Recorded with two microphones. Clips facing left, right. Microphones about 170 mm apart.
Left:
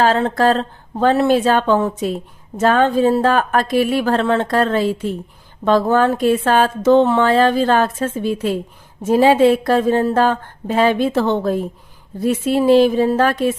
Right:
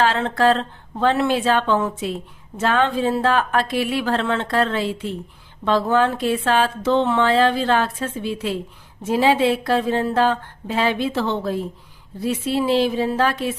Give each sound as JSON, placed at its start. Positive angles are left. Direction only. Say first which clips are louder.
{"t": 0.0, "sound": "speech", "louder": "left 3 dB", "side_deg": 40}